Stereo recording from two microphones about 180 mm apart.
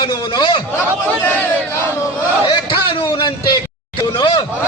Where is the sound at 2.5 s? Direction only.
30° left (ahead or behind).